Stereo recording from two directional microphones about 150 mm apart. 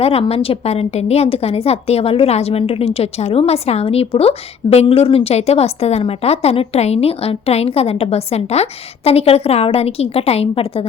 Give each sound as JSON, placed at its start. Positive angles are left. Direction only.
{"t": 0.0, "sound": "a woman's voice", "side_deg": 40}